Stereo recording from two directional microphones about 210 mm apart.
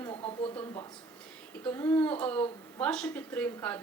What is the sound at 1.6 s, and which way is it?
Speech, 10° left (ahead or behind).